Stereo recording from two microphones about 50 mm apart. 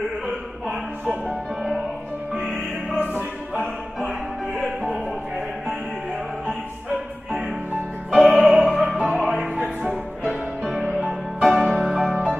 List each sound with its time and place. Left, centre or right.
1.2 s music: centre
6.4 s music: right
8.1 s music: centre
9.6 s music: right
11.4 s music: centre